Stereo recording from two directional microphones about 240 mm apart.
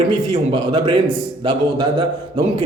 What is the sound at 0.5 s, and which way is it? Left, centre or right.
A man's voice, right.